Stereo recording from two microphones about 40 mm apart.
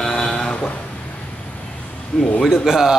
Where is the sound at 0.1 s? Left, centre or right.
Centre.